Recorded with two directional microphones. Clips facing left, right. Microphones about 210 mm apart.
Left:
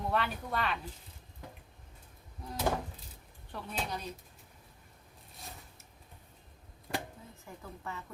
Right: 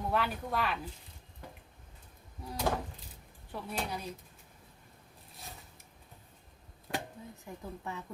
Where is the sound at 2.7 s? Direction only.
Centre (ahead or behind).